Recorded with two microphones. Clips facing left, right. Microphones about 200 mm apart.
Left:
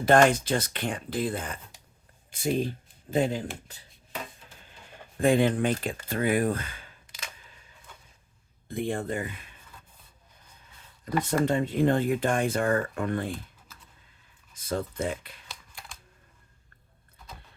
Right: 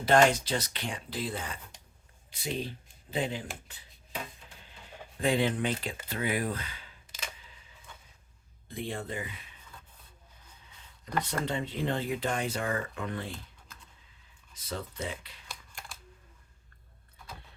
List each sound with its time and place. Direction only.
0.0 s speech: 50° left (ahead or behind)
3.7 s a sound: 40° left (ahead or behind)
5.2 s speech: 50° left (ahead or behind)
8.6 s speech: 50° left (ahead or behind)
11.2 s speech: 50° left (ahead or behind)
13.7 s computer keyboard: 5° left (ahead or behind)
14.5 s speech: 50° left (ahead or behind)